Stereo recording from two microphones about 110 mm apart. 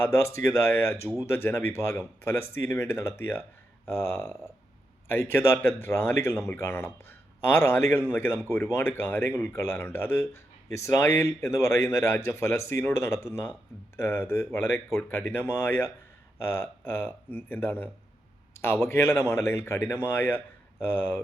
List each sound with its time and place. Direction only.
0.3 s a man's voice: 20° left (ahead or behind)